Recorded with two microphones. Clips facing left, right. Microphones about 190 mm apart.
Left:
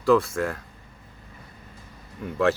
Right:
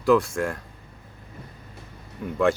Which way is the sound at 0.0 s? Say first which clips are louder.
Even; centre (ahead or behind).